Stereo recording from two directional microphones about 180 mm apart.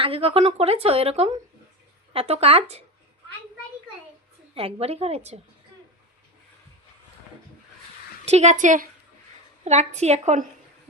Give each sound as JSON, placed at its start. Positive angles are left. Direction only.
{"t": 0.0, "sound": "a woman's voice", "side_deg": -30}
{"t": 4.5, "sound": "a woman's voice", "side_deg": -35}
{"t": 8.2, "sound": "a woman's voice", "side_deg": -35}